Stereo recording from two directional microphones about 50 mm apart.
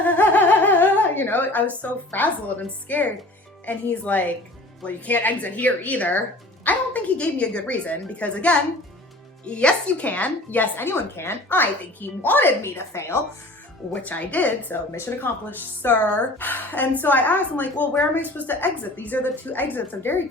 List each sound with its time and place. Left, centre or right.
0.0 s a sound: left
2.6 s a woman's voice: left
10.9 s a woman's voice: left
12.6 s a woman's voice: left
14.0 s a woman's voice: left
15.2 s a woman's voice: left
20.0 s a woman's voice: left